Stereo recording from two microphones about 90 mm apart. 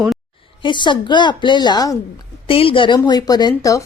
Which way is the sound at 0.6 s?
60° left (ahead or behind).